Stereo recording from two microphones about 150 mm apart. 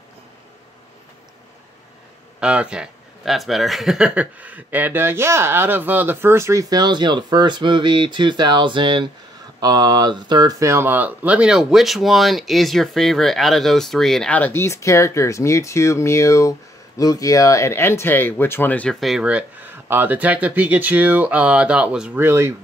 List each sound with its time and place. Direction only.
2.4 s speech: 5° right (ahead or behind)